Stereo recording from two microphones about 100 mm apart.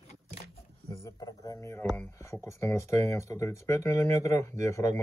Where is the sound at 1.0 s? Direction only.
35° left (ahead or behind).